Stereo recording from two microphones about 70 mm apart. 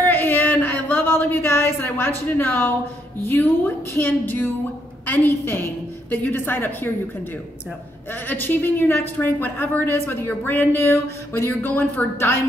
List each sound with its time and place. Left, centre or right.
0.0 s a sound: left
3.2 s a woman's voice: left
8.1 s a woman's voice: left